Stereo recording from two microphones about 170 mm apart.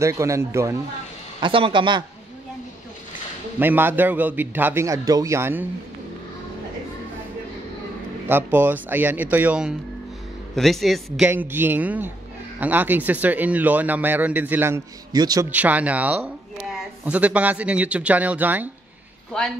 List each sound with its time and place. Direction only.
0.0 s speech: 15° right (ahead or behind)
1.4 s speech: 30° right (ahead or behind)
3.5 s speech: 10° right (ahead or behind)
8.3 s speech: 10° right (ahead or behind)
11.1 s speech: 10° right (ahead or behind)
15.5 s speech: 10° right (ahead or behind)
19.3 s speech: 5° left (ahead or behind)